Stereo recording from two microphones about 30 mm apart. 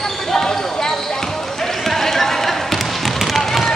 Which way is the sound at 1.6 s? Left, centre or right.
Centre.